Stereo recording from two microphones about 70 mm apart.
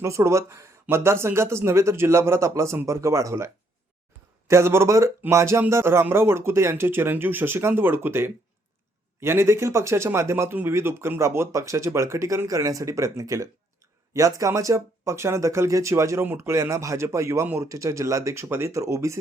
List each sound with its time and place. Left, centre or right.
0.0 s speech: right